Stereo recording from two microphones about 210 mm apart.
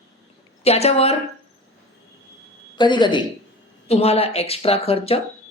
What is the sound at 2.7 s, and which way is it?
Speech, 20° left (ahead or behind).